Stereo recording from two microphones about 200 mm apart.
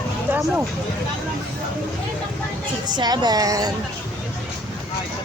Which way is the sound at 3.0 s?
20° right (ahead or behind).